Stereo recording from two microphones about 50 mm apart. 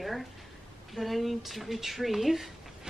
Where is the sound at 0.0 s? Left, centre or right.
Centre.